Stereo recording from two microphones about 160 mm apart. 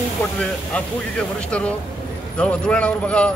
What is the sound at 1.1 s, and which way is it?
A man's voice, 5° left (ahead or behind).